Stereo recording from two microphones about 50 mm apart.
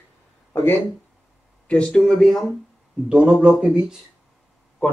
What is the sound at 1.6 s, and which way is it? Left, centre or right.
Speech, centre.